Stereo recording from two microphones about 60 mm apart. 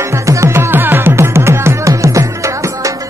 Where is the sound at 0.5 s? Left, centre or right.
Right.